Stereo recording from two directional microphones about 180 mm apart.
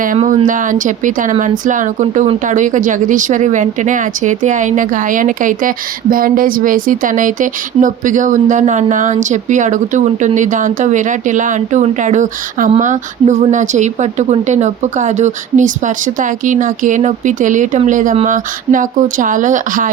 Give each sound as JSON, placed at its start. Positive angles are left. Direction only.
{"t": 0.4, "sound": "a woman's voice", "side_deg": -45}